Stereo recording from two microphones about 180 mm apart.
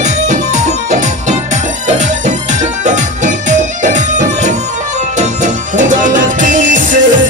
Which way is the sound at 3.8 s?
40° right (ahead or behind).